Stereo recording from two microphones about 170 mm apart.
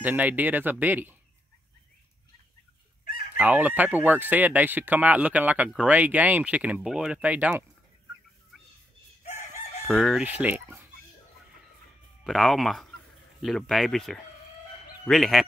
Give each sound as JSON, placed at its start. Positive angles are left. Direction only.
{"t": 0.0, "sound": "speech", "side_deg": -10}
{"t": 3.3, "sound": "speech", "side_deg": -10}
{"t": 9.2, "sound": "chicken", "side_deg": 40}
{"t": 9.8, "sound": "speech", "side_deg": 0}
{"t": 12.2, "sound": "speech", "side_deg": 0}